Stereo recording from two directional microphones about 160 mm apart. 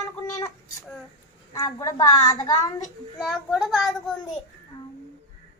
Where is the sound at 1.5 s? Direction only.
25° left (ahead or behind).